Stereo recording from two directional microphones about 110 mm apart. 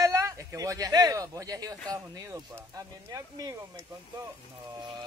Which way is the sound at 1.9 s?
35° right (ahead or behind).